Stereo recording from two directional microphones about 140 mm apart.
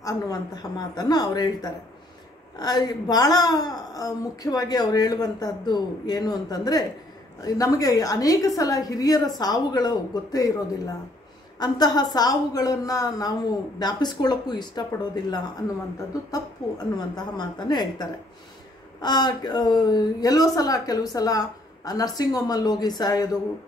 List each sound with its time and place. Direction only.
0.0 s a woman's voice: 30° left (ahead or behind)
11.6 s a woman's voice: 30° left (ahead or behind)